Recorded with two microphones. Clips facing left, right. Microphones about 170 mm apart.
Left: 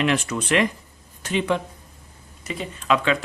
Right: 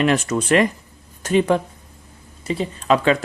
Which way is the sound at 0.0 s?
45° right (ahead or behind).